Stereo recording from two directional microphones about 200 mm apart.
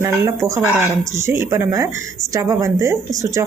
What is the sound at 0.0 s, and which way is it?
Speech, 15° right (ahead or behind).